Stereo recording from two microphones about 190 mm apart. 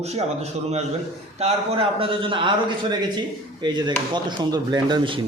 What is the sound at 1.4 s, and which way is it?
A man's voice, 30° right (ahead or behind).